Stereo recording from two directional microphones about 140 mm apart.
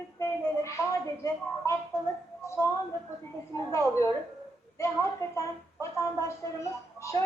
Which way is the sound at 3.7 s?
20° left (ahead or behind).